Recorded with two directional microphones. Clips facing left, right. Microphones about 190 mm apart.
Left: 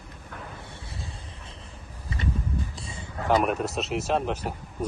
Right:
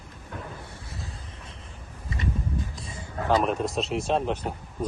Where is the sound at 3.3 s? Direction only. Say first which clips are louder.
Even; 10° left (ahead or behind).